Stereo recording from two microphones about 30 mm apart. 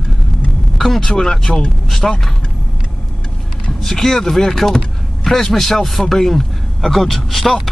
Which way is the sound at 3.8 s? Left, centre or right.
Centre.